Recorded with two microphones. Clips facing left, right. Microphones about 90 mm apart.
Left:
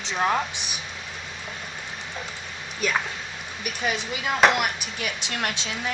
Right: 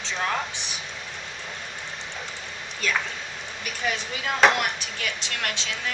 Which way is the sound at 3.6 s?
15° left (ahead or behind).